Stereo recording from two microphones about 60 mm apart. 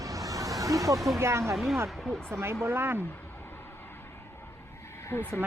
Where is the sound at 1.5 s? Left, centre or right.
Centre.